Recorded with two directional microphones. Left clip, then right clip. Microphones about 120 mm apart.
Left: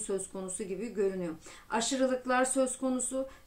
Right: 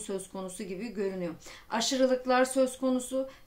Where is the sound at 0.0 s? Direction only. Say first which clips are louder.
Left 1 dB; 25° right (ahead or behind).